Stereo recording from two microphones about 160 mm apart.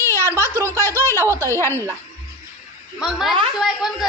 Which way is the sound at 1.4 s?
15° left (ahead or behind).